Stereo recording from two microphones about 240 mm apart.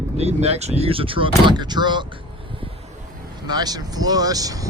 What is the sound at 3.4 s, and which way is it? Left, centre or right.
Speech, centre.